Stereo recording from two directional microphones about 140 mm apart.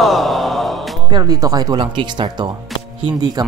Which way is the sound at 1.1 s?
30° right (ahead or behind).